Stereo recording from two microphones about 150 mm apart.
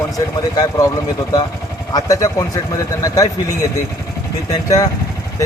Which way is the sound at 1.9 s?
25° left (ahead or behind).